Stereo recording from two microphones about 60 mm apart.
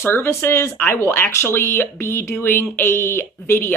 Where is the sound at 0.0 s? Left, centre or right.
Left.